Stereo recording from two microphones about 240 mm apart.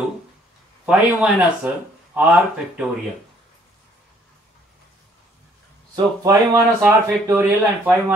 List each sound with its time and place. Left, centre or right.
0.8 s speech: centre
5.9 s speech: centre